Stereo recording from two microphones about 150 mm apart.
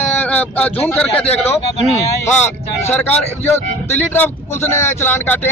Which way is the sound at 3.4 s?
15° left (ahead or behind).